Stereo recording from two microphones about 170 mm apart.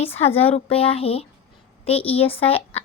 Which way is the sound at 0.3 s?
10° left (ahead or behind).